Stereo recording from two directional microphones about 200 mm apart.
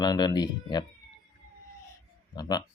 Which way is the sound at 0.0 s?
20° left (ahead or behind).